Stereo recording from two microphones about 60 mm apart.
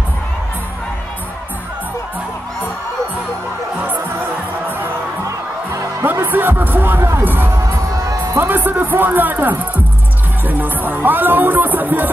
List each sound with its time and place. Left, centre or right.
3.7 s music: right
6.1 s music: right
7.5 s music: right
8.4 s music: right